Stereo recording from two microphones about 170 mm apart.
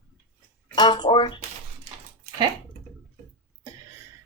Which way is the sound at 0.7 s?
25° left (ahead or behind).